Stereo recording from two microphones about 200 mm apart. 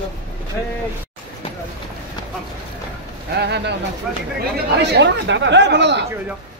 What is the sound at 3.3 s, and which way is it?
Speech, 55° right (ahead or behind).